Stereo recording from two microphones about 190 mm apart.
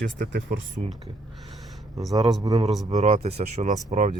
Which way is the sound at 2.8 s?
35° right (ahead or behind).